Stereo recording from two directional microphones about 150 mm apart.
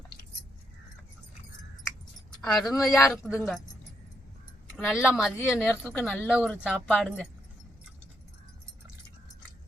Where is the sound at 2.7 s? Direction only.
Centre (ahead or behind).